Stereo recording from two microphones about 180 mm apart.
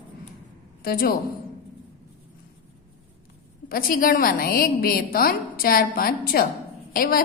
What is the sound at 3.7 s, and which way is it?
A woman's voice, 55° left (ahead or behind).